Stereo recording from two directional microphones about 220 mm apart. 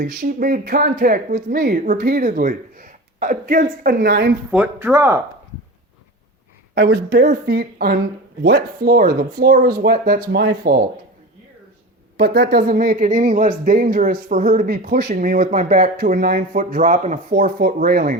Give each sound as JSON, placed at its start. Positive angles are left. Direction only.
{"t": 0.0, "sound": "speech", "side_deg": -40}
{"t": 4.5, "sound": "speech", "side_deg": -5}
{"t": 6.7, "sound": "speech", "side_deg": -50}
{"t": 12.1, "sound": "speech", "side_deg": -45}